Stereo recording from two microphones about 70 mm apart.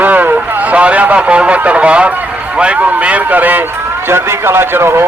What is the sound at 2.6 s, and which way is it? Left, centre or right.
A man's voice, centre.